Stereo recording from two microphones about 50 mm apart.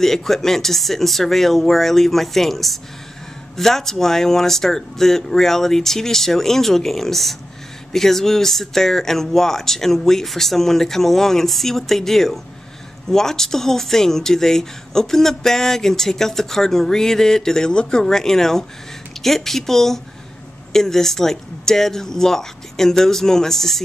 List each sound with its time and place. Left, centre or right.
0.0 s speech: centre